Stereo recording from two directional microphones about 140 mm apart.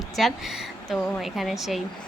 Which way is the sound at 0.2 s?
Centre (ahead or behind).